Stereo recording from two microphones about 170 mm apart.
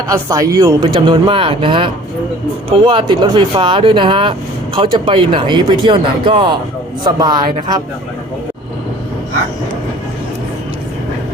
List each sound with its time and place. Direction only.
0.1 s speech: 20° right (ahead or behind)